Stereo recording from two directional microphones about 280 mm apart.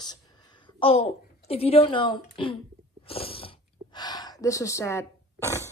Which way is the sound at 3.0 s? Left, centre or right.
Centre.